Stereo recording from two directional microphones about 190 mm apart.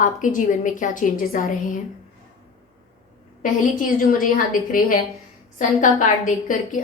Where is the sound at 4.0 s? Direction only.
45° left (ahead or behind).